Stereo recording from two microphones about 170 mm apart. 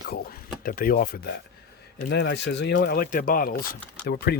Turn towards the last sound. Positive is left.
turn(degrees=75)  # may be behind; listen again after turning